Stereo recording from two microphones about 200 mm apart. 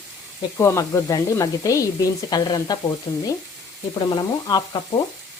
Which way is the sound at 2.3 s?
20° left (ahead or behind).